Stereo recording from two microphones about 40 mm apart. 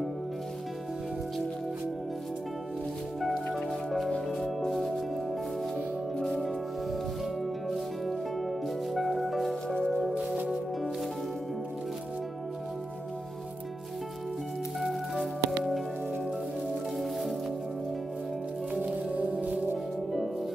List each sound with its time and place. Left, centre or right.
4.4 s music: centre
6.1 s music: centre
8.9 s music: centre
14.8 s music: centre
19.2 s music: right